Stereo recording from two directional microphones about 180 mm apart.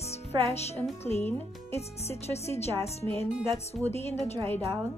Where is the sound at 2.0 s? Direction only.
35° left (ahead or behind).